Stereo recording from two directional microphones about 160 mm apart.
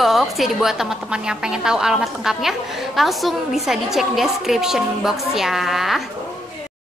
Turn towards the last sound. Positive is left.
turn(degrees=0)  # may be behind; listen again after turning